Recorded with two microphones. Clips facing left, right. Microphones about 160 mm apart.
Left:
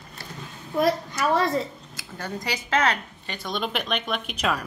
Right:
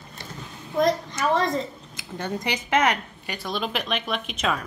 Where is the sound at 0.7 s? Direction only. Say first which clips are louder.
Right 1 dB; 5° left (ahead or behind).